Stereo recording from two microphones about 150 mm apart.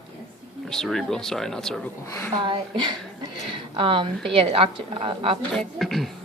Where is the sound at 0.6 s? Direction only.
5° left (ahead or behind).